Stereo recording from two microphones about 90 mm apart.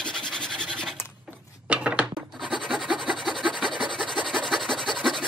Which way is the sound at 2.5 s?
Centre (ahead or behind).